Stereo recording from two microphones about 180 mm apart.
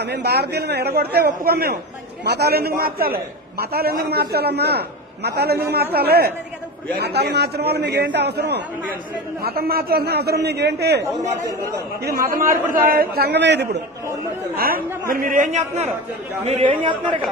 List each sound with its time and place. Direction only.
0.0 s a man's voice: 65° right (ahead or behind)
9.4 s a man's voice: 60° right (ahead or behind)
12.3 s a man's voice: 50° right (ahead or behind); by 13.8 s 70° right (ahead or behind)
15.0 s a man's voice: 50° right (ahead or behind); by 17.2 s 25° right (ahead or behind)